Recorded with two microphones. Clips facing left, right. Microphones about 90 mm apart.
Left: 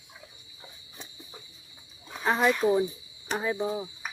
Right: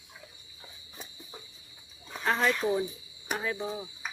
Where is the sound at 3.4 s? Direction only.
15° left (ahead or behind).